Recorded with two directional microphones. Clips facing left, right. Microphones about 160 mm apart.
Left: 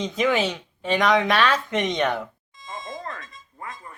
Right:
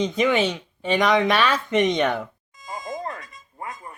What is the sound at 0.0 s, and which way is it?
Speech, centre (ahead or behind).